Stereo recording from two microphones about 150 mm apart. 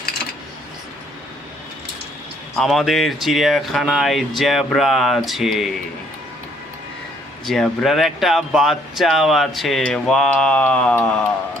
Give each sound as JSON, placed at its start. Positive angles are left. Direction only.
{"t": 2.6, "sound": "speech", "side_deg": 0}
{"t": 7.4, "sound": "speech", "side_deg": 0}